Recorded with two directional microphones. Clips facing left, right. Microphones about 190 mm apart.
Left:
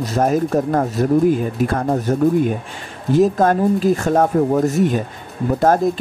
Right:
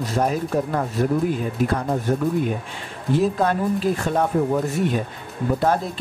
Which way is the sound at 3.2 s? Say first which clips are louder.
Left 7 dB; 45° left (ahead or behind).